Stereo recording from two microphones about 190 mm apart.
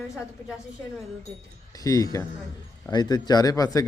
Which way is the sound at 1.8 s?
20° left (ahead or behind).